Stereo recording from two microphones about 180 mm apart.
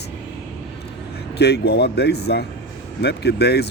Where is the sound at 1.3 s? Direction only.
65° left (ahead or behind).